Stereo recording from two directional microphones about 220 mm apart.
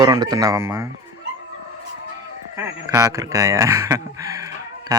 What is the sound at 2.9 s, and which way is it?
Speech, 15° right (ahead or behind).